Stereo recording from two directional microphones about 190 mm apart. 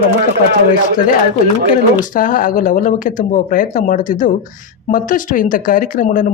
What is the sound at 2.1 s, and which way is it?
Speech, 45° left (ahead or behind).